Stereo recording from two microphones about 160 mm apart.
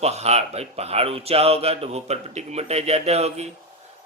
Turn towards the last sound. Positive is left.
turn(degrees=-40)  # may be behind; listen again after turning